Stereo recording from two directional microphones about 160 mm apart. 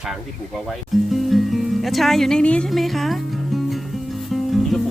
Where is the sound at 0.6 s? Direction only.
Centre (ahead or behind).